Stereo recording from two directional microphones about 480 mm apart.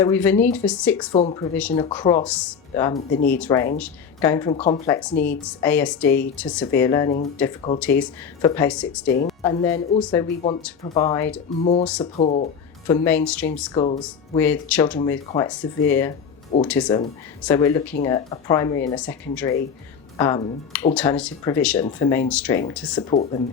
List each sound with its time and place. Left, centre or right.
0.0 s speech: centre
1.1 s speech: centre
2.9 s speech: centre
3.3 s a woman's voice: centre
10.2 s speech: centre
11.9 s speech: centre
12.2 s speech: centre
12.9 s speech: centre